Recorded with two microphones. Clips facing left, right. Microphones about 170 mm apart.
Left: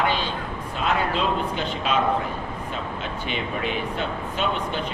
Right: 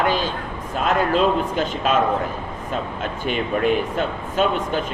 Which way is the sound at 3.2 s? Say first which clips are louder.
Right 8 dB; 45° right (ahead or behind).